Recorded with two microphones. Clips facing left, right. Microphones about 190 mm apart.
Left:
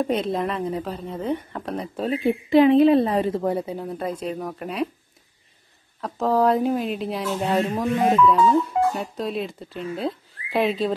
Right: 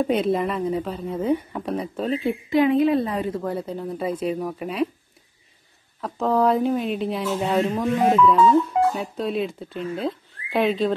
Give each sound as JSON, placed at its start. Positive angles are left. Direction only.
{"t": 0.0, "sound": "speech", "side_deg": 0}
{"t": 2.5, "sound": "a woman's voice", "side_deg": 30}
{"t": 3.6, "sound": "speech", "side_deg": 5}
{"t": 5.9, "sound": "speech", "side_deg": 0}